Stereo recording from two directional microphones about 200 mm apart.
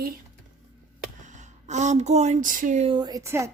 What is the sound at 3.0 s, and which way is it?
Speech, 20° right (ahead or behind).